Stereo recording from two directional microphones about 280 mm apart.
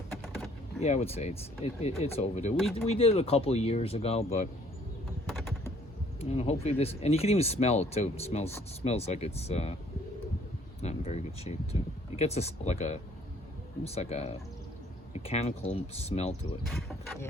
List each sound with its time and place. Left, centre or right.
0.8 s speech: left
6.1 s speech: left
10.8 s speech: left
16.6 s speech: centre